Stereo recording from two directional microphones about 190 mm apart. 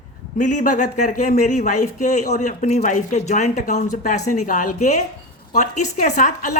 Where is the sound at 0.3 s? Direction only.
40° left (ahead or behind).